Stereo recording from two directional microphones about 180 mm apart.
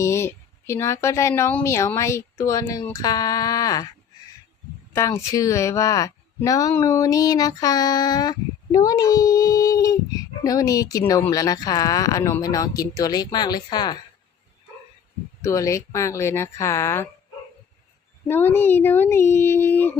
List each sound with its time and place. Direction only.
0.0 s a woman's voice: 15° left (ahead or behind)
4.9 s speech: 15° left (ahead or behind)
15.4 s a woman's voice: 15° left (ahead or behind)
18.3 s a woman's voice: 10° left (ahead or behind)